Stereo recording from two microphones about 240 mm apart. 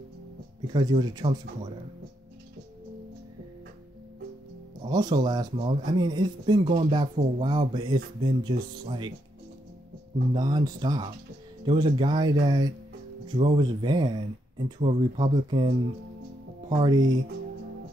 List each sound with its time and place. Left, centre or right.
0.7 s speech: centre
4.8 s speech: centre
10.3 s speech: centre
16.7 s speech: centre